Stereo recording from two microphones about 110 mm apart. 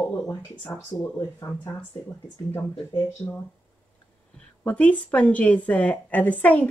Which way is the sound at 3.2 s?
20° left (ahead or behind).